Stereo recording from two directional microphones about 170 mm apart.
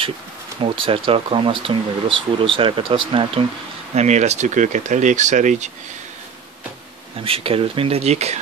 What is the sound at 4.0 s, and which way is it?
Speech, 40° right (ahead or behind).